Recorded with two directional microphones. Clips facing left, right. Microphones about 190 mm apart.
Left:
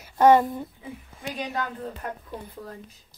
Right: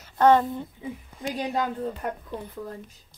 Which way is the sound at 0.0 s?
10° left (ahead or behind).